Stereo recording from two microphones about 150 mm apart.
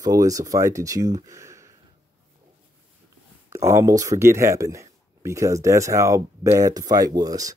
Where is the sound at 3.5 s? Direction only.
20° right (ahead or behind).